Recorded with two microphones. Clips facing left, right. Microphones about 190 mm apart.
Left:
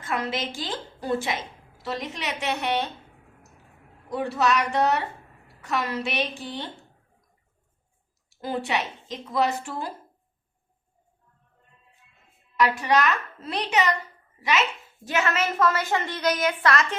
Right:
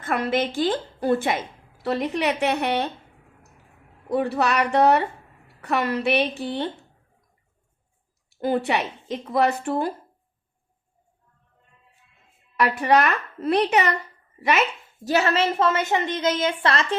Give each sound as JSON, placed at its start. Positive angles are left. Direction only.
{"t": 0.0, "sound": "a woman's voice", "side_deg": -55}
{"t": 4.1, "sound": "a woman's voice", "side_deg": -60}
{"t": 8.3, "sound": "a woman's voice", "side_deg": -60}
{"t": 12.5, "sound": "a woman's voice", "side_deg": -55}
{"t": 15.0, "sound": "a woman's voice", "side_deg": -35}